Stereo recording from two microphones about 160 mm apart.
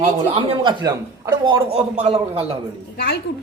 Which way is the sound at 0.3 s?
30° right (ahead or behind).